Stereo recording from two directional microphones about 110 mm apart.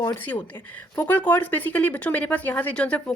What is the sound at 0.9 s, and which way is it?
Speech, 15° left (ahead or behind).